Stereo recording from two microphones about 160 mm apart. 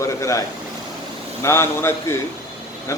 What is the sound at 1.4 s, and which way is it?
Speech, 15° left (ahead or behind).